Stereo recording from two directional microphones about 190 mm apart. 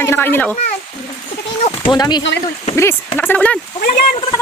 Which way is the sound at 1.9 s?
20° left (ahead or behind).